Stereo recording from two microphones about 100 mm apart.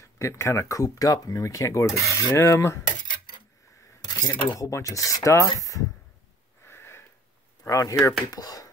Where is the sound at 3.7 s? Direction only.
30° left (ahead or behind).